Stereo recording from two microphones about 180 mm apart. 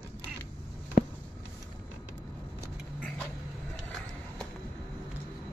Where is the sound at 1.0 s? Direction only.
50° left (ahead or behind).